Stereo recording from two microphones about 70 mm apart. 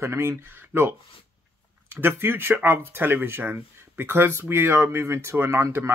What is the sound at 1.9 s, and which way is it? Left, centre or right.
Speech, right.